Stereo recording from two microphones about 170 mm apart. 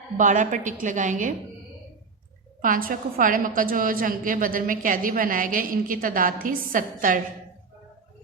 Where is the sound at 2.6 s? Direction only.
55° right (ahead or behind).